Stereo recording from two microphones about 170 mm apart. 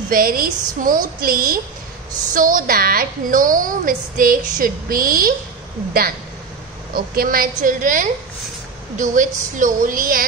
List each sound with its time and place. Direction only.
0.1 s a woman's voice: 55° right (ahead or behind)
6.9 s a woman's voice: 60° right (ahead or behind)